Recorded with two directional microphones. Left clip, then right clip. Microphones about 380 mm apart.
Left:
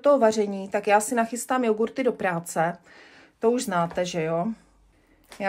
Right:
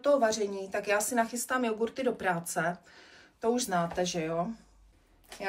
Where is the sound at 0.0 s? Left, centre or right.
Centre.